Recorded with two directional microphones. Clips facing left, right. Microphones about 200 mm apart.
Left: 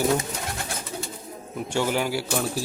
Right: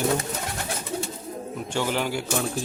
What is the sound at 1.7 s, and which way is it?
Speech, 10° left (ahead or behind).